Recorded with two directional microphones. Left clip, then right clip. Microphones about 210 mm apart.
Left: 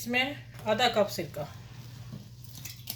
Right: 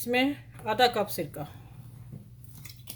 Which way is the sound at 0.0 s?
55° right (ahead or behind).